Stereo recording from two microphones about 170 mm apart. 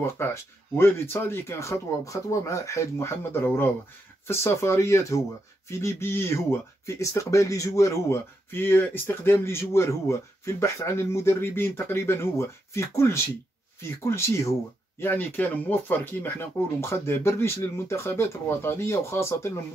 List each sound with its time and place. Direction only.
0.0 s speech: 15° left (ahead or behind)